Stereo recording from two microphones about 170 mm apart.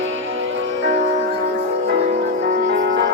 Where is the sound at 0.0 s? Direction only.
90° right.